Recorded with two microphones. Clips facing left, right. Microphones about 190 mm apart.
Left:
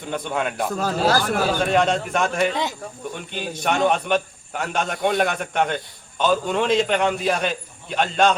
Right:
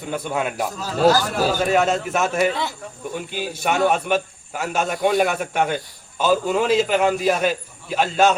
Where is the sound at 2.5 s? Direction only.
15° left (ahead or behind).